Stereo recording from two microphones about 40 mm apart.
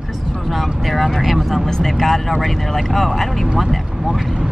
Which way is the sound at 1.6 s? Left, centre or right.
Centre.